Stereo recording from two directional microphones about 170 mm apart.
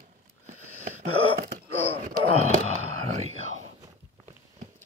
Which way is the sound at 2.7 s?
40° right (ahead or behind).